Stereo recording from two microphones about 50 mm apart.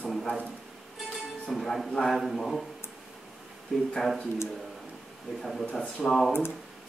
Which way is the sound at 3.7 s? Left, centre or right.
Centre.